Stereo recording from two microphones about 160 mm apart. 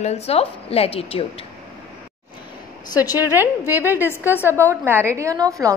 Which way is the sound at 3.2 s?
10° right (ahead or behind).